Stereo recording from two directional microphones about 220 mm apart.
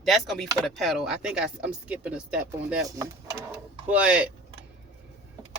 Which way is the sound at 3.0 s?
15° right (ahead or behind).